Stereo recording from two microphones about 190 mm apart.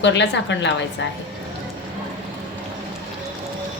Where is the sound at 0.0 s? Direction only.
70° left (ahead or behind).